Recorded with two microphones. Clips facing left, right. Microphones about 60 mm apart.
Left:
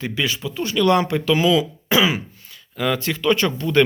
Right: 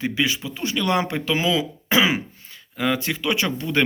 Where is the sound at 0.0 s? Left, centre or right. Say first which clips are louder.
Right 1 dB; right.